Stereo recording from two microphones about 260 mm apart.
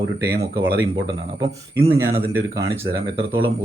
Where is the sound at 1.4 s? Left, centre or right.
Centre.